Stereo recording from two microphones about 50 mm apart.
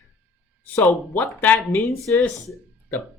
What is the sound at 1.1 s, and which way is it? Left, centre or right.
Speech, left.